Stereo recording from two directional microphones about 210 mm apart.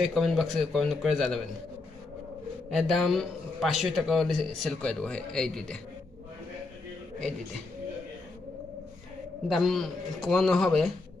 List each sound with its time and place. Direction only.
0.0 s speech: centre (ahead or behind)
2.7 s speech: centre (ahead or behind)
9.5 s speech: centre (ahead or behind)